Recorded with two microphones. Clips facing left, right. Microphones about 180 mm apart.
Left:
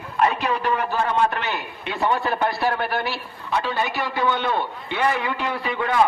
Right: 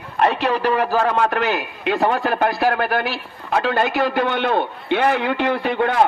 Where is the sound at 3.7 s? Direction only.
50° right (ahead or behind).